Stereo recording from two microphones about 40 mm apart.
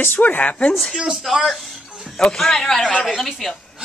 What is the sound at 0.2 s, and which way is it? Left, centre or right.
Speech, left.